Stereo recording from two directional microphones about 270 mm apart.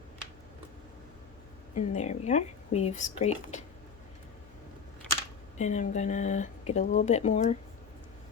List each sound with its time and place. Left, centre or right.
1.7 s speech: left
5.5 s speech: left